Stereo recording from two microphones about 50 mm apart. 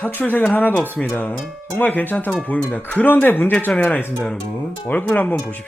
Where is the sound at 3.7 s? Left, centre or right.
Left.